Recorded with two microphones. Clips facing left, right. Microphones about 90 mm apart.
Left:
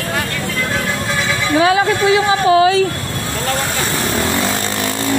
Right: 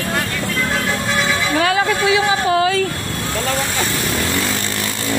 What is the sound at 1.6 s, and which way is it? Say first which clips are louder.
Speech: left 5 dB; 20° left (ahead or behind).